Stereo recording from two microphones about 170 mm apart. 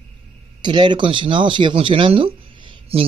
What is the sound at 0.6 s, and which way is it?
Speech, 25° right (ahead or behind).